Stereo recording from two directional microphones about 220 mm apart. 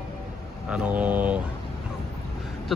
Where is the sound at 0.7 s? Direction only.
5° right (ahead or behind).